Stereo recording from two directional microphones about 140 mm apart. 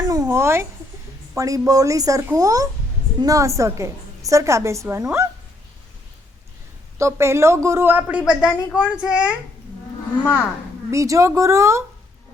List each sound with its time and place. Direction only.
0.1 s a sound: 20° right (ahead or behind)
1.4 s a woman's voice: 25° right (ahead or behind)
7.0 s a woman's voice: 20° right (ahead or behind)
10.9 s a woman's voice: 20° right (ahead or behind)